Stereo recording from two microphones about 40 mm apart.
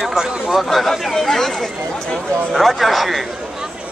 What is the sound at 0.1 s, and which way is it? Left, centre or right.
Speech, centre.